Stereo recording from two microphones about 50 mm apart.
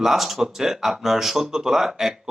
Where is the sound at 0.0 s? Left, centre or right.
Centre.